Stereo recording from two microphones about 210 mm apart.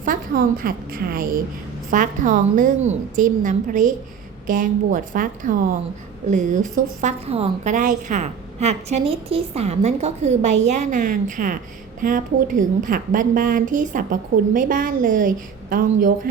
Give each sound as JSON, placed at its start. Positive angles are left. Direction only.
{"t": 0.0, "sound": "a woman's voice", "side_deg": -40}